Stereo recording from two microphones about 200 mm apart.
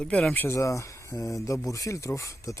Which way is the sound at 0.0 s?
5° left (ahead or behind).